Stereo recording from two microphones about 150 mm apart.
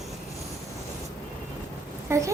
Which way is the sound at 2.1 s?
20° right (ahead or behind).